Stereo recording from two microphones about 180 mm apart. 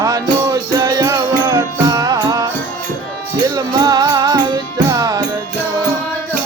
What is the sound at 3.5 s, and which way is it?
Music, 20° right (ahead or behind).